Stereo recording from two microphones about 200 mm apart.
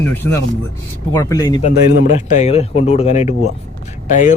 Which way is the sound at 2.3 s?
30° left (ahead or behind).